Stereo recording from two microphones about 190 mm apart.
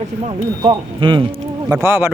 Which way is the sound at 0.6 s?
25° right (ahead or behind).